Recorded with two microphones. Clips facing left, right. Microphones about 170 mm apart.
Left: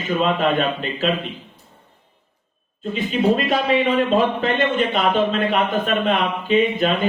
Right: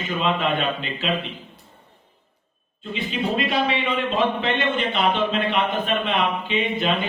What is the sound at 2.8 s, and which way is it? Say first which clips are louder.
Speech: left 7 dB; 45° left (ahead or behind).